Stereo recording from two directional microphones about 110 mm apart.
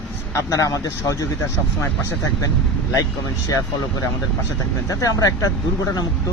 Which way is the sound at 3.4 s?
30° left (ahead or behind).